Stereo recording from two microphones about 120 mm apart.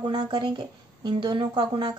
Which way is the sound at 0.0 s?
40° right (ahead or behind).